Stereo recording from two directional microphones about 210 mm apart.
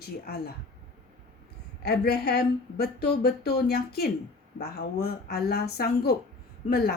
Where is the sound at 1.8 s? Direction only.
50° left (ahead or behind).